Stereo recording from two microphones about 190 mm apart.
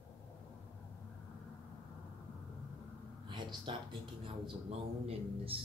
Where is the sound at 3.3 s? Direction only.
25° right (ahead or behind).